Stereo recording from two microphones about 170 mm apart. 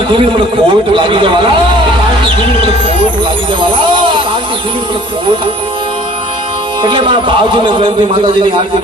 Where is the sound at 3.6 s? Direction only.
30° right (ahead or behind).